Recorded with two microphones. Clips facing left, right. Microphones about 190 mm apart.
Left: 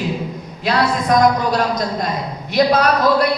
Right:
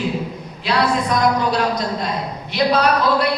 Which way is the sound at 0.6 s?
45° left (ahead or behind).